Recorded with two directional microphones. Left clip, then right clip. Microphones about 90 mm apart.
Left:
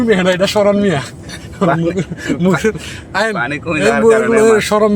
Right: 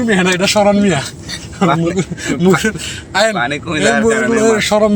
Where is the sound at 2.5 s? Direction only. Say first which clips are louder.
Even; 40° left (ahead or behind).